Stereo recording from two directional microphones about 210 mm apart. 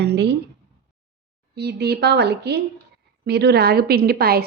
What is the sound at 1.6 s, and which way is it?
A woman's voice, 50° right (ahead or behind).